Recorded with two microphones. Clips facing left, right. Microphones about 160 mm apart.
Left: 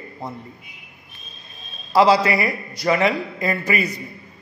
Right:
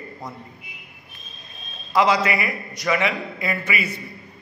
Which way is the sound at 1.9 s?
30° left (ahead or behind).